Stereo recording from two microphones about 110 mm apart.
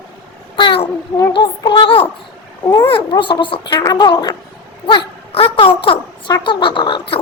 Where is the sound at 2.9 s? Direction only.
50° left (ahead or behind).